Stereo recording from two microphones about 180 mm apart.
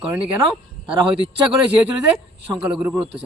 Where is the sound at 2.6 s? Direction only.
5° right (ahead or behind).